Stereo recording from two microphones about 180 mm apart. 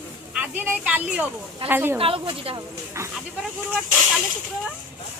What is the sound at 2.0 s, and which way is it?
Speech, 30° right (ahead or behind).